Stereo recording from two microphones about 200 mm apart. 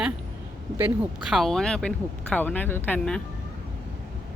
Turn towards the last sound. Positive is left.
turn(degrees=10)  # may be behind; listen again after turning